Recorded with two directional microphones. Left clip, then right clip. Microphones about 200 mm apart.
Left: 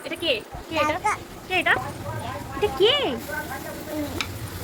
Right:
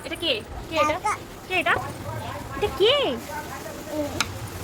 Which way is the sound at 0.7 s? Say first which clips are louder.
Even; centre (ahead or behind).